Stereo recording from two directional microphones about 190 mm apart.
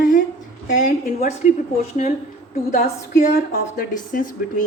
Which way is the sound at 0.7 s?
40° left (ahead or behind).